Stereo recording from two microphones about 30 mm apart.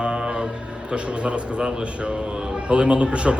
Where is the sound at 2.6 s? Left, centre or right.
Right.